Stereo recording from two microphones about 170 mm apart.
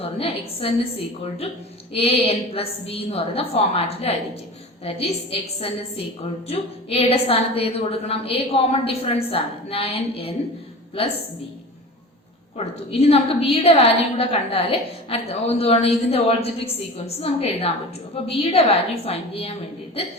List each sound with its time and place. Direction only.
0.0 s a woman's voice: 35° left (ahead or behind)
12.5 s a woman's voice: 35° left (ahead or behind)